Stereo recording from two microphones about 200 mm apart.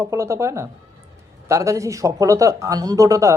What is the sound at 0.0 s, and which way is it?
A man's voice, 15° right (ahead or behind).